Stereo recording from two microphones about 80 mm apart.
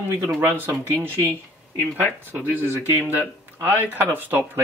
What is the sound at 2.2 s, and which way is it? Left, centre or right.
Speech, right.